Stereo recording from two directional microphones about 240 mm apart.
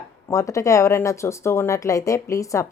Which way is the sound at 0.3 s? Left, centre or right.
Centre.